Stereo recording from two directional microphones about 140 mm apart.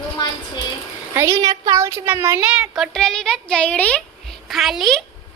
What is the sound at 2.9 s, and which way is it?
A woman's voice, 5° left (ahead or behind).